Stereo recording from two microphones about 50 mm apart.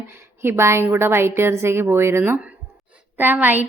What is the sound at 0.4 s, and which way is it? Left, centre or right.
A woman's voice, right.